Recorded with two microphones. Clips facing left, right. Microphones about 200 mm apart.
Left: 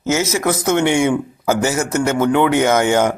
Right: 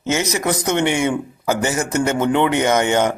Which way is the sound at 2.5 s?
5° left (ahead or behind).